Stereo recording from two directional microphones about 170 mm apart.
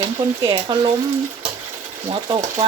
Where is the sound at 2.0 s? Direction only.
30° right (ahead or behind).